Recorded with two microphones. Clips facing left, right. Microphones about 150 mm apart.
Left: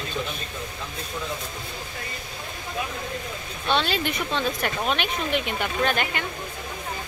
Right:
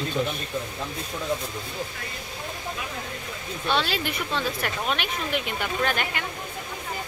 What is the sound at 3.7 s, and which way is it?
Speech, 5° right (ahead or behind).